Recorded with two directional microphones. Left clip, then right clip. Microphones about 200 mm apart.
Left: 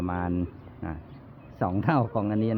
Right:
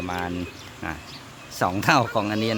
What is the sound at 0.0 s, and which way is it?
Speech, 15° left (ahead or behind).